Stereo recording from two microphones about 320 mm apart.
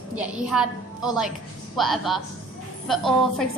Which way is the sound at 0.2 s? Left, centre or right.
Centre.